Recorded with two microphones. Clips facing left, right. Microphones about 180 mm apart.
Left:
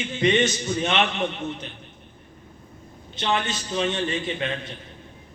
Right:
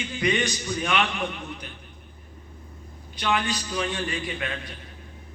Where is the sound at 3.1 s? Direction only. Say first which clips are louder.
Left 1 dB; 25° left (ahead or behind).